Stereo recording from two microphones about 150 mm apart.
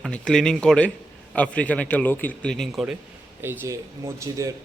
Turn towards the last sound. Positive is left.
turn(degrees=-20)  # may be behind; listen again after turning